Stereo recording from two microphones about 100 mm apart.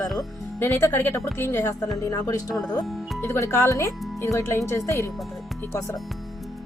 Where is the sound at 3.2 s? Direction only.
25° left (ahead or behind).